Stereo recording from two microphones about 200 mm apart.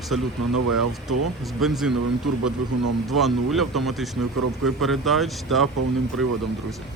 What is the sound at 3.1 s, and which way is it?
Speech, centre (ahead or behind).